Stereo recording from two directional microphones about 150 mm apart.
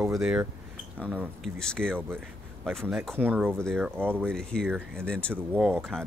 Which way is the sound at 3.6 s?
Centre (ahead or behind).